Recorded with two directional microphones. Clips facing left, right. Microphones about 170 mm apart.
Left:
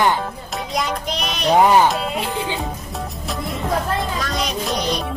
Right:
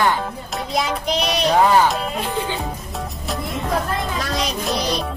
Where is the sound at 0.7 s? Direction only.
Centre (ahead or behind).